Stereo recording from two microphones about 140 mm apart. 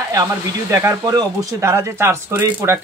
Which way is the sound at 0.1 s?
25° right (ahead or behind).